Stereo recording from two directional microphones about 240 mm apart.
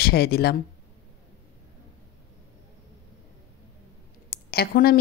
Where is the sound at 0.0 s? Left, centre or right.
Left.